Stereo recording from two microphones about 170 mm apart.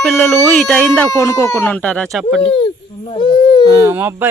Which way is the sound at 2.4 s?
35° left (ahead or behind).